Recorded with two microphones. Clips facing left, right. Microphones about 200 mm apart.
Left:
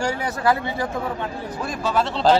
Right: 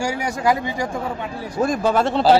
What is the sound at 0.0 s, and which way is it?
Speech, 10° right (ahead or behind).